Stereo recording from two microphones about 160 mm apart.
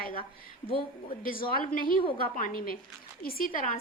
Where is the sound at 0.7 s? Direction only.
35° left (ahead or behind).